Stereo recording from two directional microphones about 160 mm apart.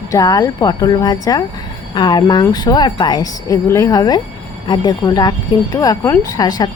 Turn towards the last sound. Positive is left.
turn(degrees=15)  # may be behind; listen again after turning